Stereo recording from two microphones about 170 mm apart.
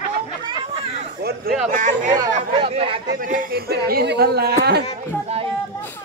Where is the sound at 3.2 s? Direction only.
55° right (ahead or behind); by 4.8 s 70° right (ahead or behind).